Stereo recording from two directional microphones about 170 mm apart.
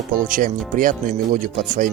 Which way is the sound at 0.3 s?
50° right (ahead or behind).